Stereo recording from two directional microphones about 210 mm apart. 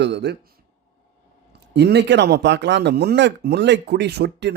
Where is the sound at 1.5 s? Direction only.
50° right (ahead or behind).